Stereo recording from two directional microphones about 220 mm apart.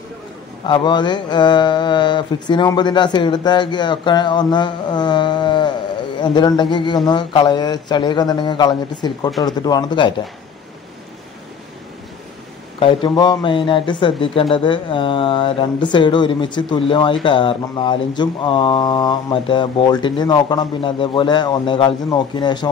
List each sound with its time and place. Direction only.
0.7 s a man's voice: 20° left (ahead or behind)
12.7 s a man's voice: 20° left (ahead or behind)